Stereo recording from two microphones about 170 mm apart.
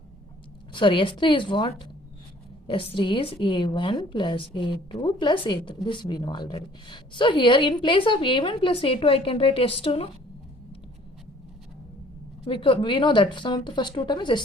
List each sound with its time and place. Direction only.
0.7 s a woman's voice: 30° left (ahead or behind)
12.5 s a woman's voice: 30° left (ahead or behind)